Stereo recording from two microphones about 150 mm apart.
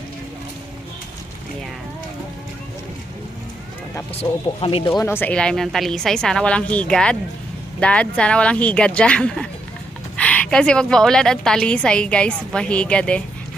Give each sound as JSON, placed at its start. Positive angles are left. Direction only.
{"t": 4.2, "sound": "speech", "side_deg": 30}
{"t": 4.6, "sound": "speech", "side_deg": 40}
{"t": 4.9, "sound": "a woman's voice", "side_deg": 15}